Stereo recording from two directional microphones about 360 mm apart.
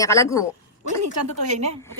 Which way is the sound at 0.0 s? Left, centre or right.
Centre.